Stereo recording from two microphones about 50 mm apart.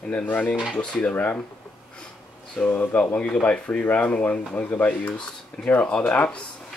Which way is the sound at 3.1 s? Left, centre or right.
Centre.